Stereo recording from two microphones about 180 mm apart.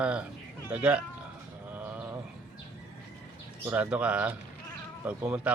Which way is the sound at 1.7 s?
10° right (ahead or behind).